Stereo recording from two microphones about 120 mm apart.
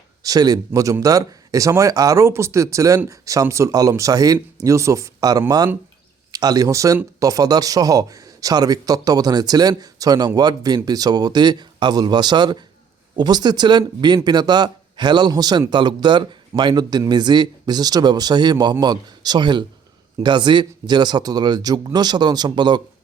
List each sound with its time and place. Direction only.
0.2 s speech: 30° right (ahead or behind)